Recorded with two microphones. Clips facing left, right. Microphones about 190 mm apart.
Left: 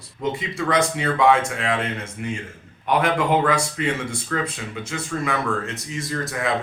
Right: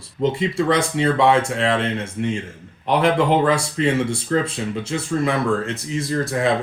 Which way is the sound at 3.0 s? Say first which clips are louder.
Right 4 dB; 30° right (ahead or behind).